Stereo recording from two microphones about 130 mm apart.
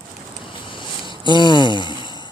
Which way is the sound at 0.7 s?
40° left (ahead or behind).